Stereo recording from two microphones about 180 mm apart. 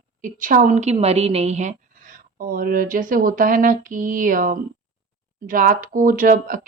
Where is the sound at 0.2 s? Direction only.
45° right (ahead or behind).